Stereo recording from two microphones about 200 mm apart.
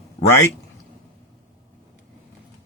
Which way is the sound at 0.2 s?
40° left (ahead or behind).